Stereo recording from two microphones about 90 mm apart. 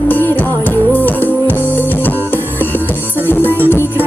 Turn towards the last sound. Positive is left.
turn(degrees=25)  # may be behind; listen again after turning